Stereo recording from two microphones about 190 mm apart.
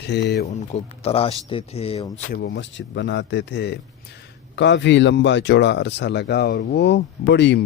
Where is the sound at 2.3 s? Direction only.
70° left (ahead or behind).